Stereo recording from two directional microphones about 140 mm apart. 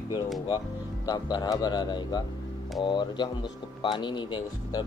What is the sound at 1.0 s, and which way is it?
Speech, 30° left (ahead or behind).